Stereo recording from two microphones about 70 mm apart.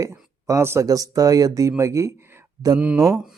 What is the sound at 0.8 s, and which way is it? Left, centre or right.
Speech, right.